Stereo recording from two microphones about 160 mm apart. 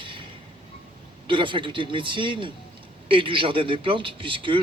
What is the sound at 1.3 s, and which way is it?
A man's voice, 30° right (ahead or behind).